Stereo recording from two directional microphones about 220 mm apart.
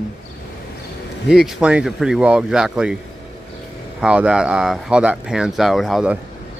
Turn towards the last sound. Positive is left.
turn(degrees=-5)  # may be behind; listen again after turning